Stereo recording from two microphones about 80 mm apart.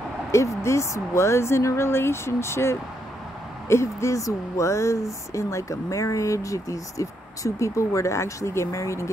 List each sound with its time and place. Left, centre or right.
0.3 s speech: left